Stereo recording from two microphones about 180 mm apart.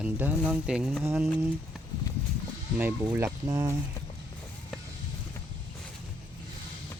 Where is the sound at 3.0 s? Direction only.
15° right (ahead or behind).